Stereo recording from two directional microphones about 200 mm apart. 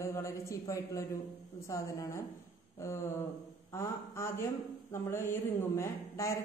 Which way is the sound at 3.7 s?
15° left (ahead or behind).